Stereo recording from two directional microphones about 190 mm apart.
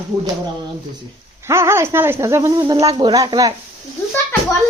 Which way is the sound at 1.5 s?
15° right (ahead or behind).